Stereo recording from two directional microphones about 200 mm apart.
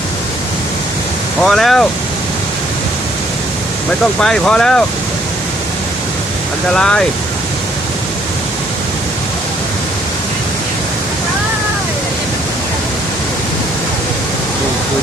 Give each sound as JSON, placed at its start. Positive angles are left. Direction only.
{"t": 1.4, "sound": "speech", "side_deg": 0}
{"t": 4.2, "sound": "speech", "side_deg": 5}
{"t": 6.7, "sound": "speech", "side_deg": 5}